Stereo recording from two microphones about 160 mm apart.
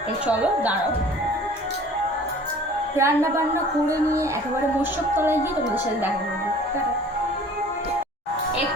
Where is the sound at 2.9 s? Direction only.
15° right (ahead or behind).